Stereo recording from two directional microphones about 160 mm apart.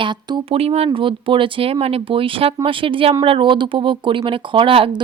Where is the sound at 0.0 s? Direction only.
30° right (ahead or behind).